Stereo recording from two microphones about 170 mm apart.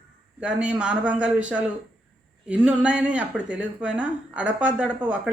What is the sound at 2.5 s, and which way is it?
Speech, 10° right (ahead or behind).